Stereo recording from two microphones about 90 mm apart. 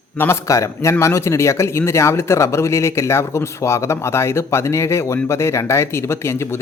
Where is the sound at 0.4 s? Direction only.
35° left (ahead or behind).